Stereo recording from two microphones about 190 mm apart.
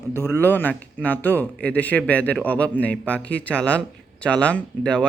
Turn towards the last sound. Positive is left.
turn(degrees=5)  # may be behind; listen again after turning